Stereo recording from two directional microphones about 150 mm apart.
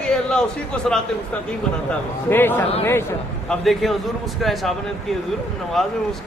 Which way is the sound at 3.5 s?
Centre (ahead or behind).